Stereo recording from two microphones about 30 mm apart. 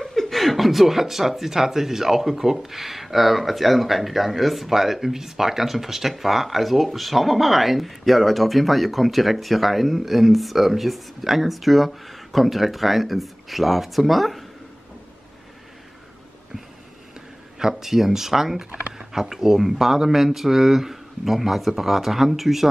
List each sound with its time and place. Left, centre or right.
0.0 s chuckle: centre
1.5 s speech: centre
17.6 s speech: centre